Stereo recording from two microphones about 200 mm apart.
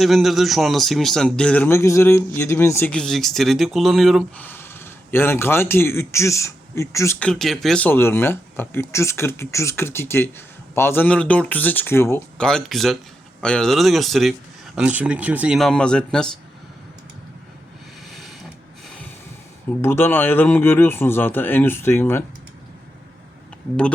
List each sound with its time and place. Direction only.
0.0 s a man's voice: centre (ahead or behind)
4.4 s a man's voice: 10° left (ahead or behind)
18.1 s a sound: centre (ahead or behind)
19.8 s speech: 10° left (ahead or behind)